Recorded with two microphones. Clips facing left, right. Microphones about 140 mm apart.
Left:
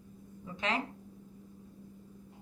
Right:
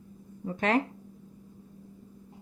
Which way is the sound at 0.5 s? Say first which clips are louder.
Right 8 dB; 50° right (ahead or behind).